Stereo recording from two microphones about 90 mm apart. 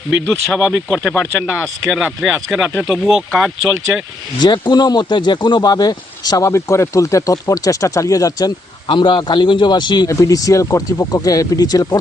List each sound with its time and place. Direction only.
0.6 s speech: 15° left (ahead or behind)
2.0 s speech: 5° right (ahead or behind)
4.4 s speech: 60° left (ahead or behind); by 8.5 s 45° left (ahead or behind)
8.9 s a man's voice: 60° left (ahead or behind)
10.1 s speech: 40° left (ahead or behind)